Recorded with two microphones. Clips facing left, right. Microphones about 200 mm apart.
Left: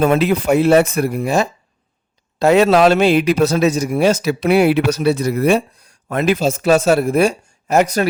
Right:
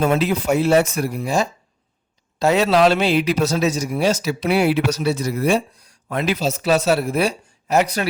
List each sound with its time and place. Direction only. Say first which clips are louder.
0.0 s a man's voice: left 4 dB; 60° left (ahead or behind)